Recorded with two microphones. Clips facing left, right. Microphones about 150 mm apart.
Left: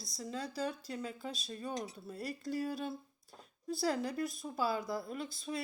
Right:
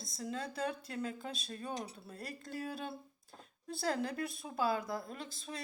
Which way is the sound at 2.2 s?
50° right (ahead or behind).